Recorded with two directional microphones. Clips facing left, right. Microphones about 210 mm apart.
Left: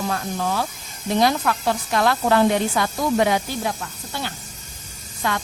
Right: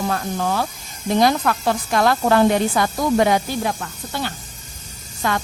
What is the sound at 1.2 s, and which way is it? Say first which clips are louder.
A woman's voice: right 2 dB; 45° right (ahead or behind).